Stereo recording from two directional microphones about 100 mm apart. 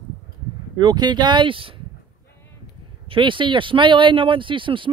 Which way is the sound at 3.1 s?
55° right (ahead or behind).